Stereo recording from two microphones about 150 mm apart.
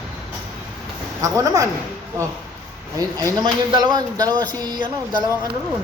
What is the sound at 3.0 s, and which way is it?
A man's voice, 25° right (ahead or behind).